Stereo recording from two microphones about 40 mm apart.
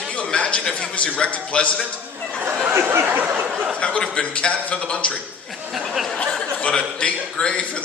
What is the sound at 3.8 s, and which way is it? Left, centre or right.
A man's voice, left.